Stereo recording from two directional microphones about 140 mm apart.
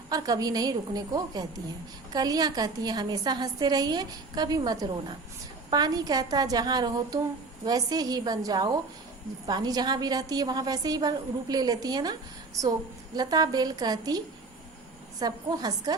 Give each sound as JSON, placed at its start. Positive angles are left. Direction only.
{"t": 0.1, "sound": "a woman's voice", "side_deg": -25}
{"t": 13.1, "sound": "a woman's voice", "side_deg": -30}
{"t": 15.2, "sound": "a woman's voice", "side_deg": -30}